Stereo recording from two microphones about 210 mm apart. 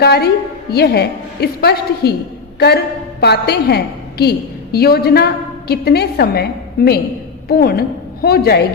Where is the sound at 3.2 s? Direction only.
50° left (ahead or behind).